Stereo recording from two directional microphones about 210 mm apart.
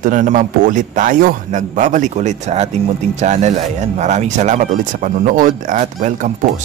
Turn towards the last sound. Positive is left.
turn(degrees=-40)  # may be behind; listen again after turning